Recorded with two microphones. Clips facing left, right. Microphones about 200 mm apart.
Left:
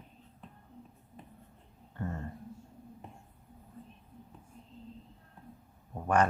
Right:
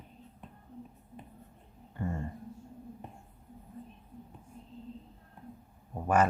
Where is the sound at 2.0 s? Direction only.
15° right (ahead or behind).